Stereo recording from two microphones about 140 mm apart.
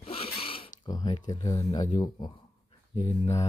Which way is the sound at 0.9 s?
30° left (ahead or behind).